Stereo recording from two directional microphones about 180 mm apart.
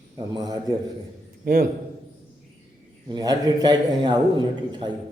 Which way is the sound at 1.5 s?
55° right (ahead or behind).